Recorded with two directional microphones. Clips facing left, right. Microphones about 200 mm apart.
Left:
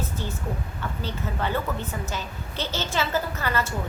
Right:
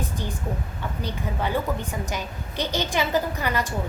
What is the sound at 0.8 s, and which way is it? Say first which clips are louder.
A woman's voice: right 1 dB; 15° right (ahead or behind).